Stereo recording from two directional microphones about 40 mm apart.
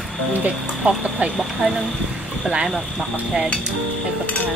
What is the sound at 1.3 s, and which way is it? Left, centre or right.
Speech, centre.